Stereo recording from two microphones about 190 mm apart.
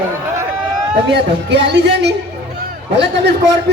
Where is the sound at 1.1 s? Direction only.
65° right (ahead or behind).